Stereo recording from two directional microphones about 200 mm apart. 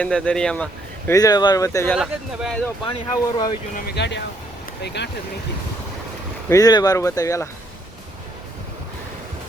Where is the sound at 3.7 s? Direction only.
55° left (ahead or behind).